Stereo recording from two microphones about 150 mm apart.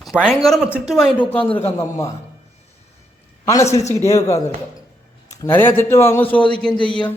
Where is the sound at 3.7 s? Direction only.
45° left (ahead or behind).